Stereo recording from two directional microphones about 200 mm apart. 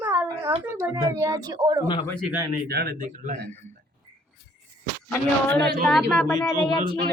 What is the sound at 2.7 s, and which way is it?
Speech, 50° right (ahead or behind).